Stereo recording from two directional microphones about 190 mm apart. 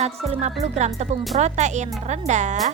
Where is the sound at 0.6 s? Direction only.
35° right (ahead or behind).